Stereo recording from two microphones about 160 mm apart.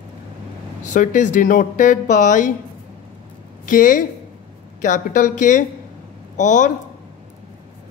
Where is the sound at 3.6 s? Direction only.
55° left (ahead or behind).